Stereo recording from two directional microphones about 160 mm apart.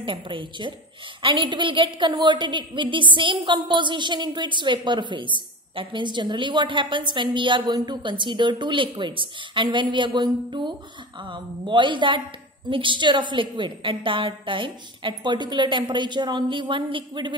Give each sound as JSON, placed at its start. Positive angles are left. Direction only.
{"t": 0.0, "sound": "a woman's voice", "side_deg": -30}